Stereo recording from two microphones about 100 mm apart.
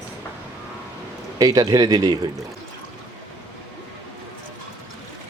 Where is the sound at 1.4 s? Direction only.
40° right (ahead or behind).